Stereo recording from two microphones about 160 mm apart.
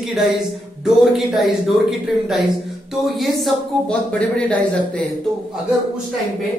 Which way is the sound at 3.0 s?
Centre (ahead or behind).